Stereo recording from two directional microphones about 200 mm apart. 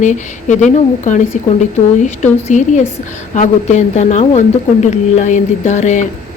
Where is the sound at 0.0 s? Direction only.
40° left (ahead or behind).